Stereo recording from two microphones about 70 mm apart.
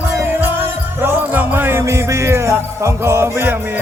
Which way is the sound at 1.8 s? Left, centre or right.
Right.